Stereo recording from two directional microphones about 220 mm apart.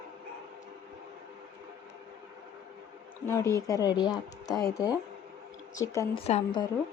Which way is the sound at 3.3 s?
15° left (ahead or behind).